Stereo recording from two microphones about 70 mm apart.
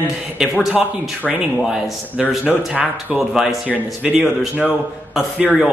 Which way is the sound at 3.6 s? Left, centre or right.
Right.